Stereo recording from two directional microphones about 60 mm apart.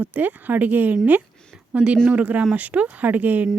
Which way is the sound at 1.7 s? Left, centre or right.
Centre.